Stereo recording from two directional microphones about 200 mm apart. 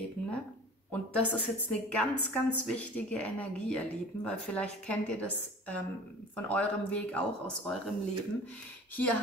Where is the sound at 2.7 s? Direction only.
5° left (ahead or behind).